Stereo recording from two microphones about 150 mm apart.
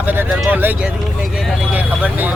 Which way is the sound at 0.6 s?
10° right (ahead or behind).